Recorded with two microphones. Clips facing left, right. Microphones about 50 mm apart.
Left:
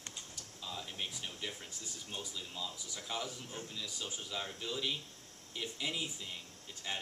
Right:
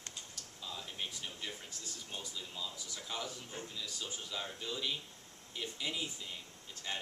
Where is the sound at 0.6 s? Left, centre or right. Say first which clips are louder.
Left 1 dB; centre.